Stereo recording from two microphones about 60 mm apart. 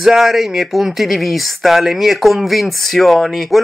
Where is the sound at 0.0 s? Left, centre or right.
Centre.